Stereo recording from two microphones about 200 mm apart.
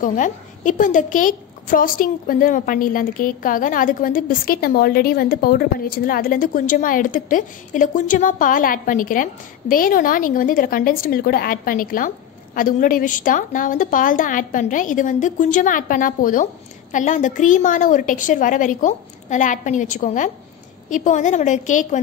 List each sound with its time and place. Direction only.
0.0 s a woman's voice: 40° left (ahead or behind)